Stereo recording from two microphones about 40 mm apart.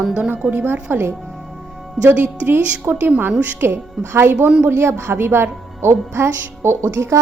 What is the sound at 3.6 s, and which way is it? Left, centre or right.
Speech, right.